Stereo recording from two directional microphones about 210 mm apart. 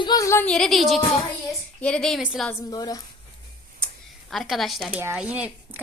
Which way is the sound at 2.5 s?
15° left (ahead or behind).